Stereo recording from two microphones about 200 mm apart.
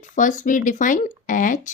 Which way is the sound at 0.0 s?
40° left (ahead or behind).